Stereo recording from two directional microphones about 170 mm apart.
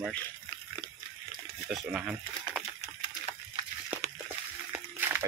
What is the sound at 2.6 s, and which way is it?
Typewriter, 5° right (ahead or behind).